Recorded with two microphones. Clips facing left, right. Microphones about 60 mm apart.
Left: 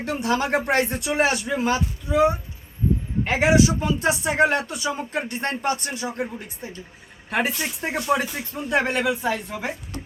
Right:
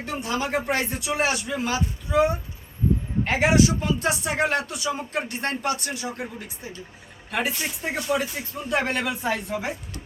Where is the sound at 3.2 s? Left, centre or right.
Centre; by 6.2 s left.